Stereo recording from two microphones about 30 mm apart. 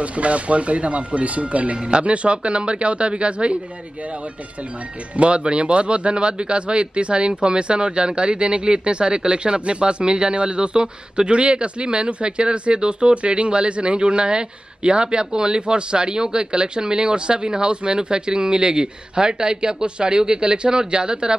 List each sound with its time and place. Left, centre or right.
0.0 s speech: right
5.1 s speech: right